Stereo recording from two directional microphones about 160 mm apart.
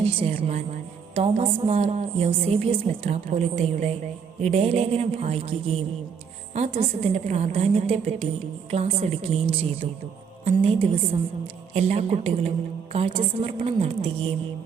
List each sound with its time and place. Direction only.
0.0 s a woman's voice: 35° right (ahead or behind)